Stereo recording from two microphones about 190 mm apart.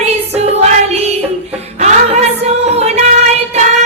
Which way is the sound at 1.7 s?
35° right (ahead or behind).